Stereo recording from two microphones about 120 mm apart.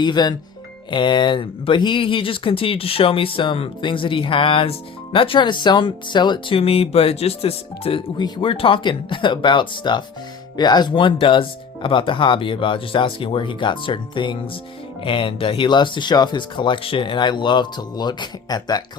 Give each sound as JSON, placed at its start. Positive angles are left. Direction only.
{"t": 0.0, "sound": "speech", "side_deg": 35}
{"t": 6.6, "sound": "speech", "side_deg": 55}